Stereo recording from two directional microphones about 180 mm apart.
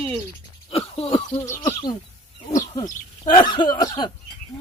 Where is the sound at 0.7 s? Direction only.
30° left (ahead or behind).